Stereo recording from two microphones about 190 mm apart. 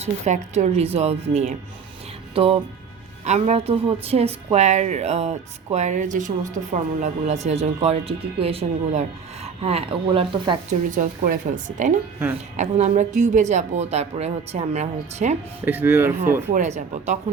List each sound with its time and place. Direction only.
0.0 s speech: 40° right (ahead or behind)
10.7 s speech: 45° right (ahead or behind)
15.6 s speech: 10° right (ahead or behind)
16.5 s speech: 40° right (ahead or behind)